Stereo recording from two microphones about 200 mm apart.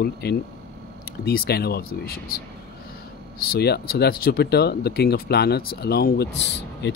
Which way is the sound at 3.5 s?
50° left (ahead or behind).